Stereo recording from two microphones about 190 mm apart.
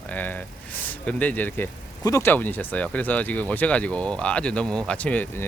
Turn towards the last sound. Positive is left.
turn(degrees=10)  # may be behind; listen again after turning